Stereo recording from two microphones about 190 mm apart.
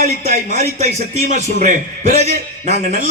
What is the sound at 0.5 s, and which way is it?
A man's voice, 35° right (ahead or behind).